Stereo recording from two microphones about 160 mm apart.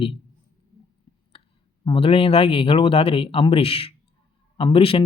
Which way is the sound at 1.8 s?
35° left (ahead or behind).